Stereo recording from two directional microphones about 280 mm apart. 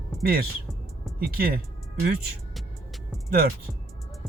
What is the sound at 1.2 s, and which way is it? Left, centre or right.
Speech, right.